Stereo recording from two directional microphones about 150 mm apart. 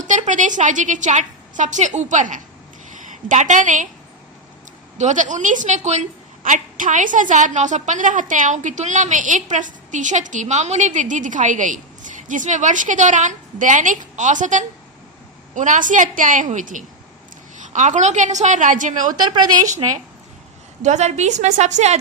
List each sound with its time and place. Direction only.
0.0 s a woman's voice: 55° right (ahead or behind)
4.9 s a woman's voice: 55° right (ahead or behind)
19.2 s a woman's voice: 30° right (ahead or behind)
20.8 s a woman's voice: 50° right (ahead or behind)